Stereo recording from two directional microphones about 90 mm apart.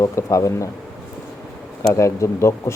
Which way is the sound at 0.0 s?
35° left (ahead or behind).